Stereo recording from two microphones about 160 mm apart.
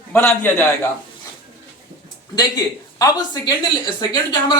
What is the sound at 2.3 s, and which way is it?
Speech, 25° left (ahead or behind).